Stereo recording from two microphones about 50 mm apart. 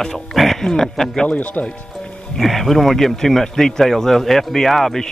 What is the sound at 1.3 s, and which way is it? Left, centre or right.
Speech, left.